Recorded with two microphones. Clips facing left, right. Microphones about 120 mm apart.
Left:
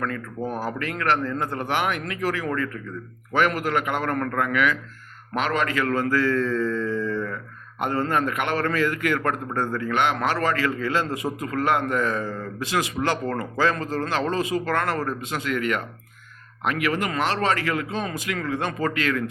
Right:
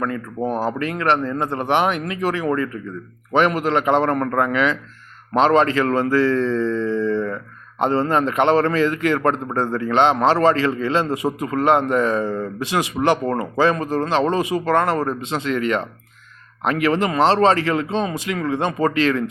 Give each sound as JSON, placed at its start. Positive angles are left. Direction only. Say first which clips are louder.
{"t": 0.3, "sound": "a man's voice", "louder": "right 8 dB", "side_deg": -25}
{"t": 7.1, "sound": "a sound", "louder": "right 6 dB", "side_deg": -25}
{"t": 7.8, "sound": "a man's voice", "louder": "right 5 dB", "side_deg": -25}